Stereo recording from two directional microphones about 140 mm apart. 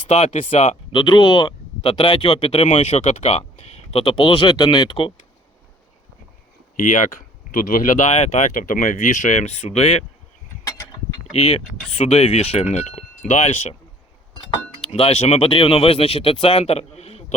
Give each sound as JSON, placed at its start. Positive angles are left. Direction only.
{"t": 0.1, "sound": "speech", "side_deg": 45}
{"t": 6.7, "sound": "speech", "side_deg": 65}
{"t": 10.6, "sound": "a sound", "side_deg": 25}
{"t": 11.3, "sound": "speech", "side_deg": 45}
{"t": 12.7, "sound": "speech", "side_deg": 60}
{"t": 14.9, "sound": "speech", "side_deg": 45}